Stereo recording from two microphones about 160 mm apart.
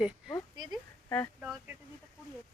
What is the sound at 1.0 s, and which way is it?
Speech, 15° left (ahead or behind).